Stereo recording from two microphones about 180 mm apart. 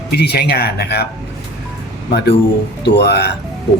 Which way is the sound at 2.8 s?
65° left (ahead or behind).